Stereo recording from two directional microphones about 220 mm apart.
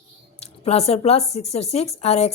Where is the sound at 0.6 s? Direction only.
30° left (ahead or behind).